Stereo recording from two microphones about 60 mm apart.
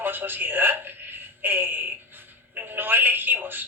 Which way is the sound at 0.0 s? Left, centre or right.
Right.